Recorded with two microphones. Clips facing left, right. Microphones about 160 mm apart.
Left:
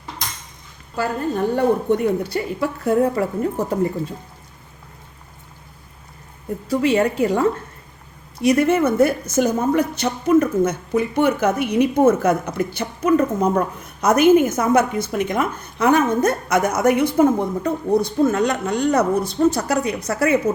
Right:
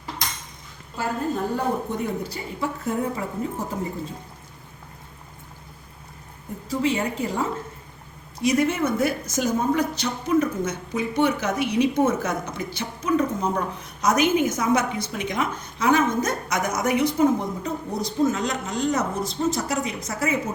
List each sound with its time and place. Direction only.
1.5 s a woman's voice: 70° left (ahead or behind)
6.7 s a woman's voice: 65° left (ahead or behind)